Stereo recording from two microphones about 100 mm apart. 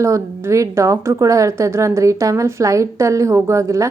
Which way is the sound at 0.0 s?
30° right (ahead or behind).